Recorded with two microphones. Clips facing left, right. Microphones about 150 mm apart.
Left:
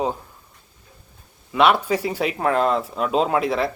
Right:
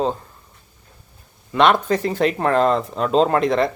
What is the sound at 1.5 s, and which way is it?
A man's voice, 5° left (ahead or behind).